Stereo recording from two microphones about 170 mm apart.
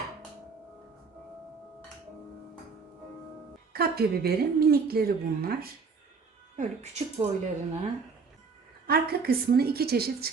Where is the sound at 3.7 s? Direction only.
65° right (ahead or behind).